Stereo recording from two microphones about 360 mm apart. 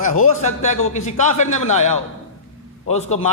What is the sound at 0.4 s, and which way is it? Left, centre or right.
A man's voice, centre.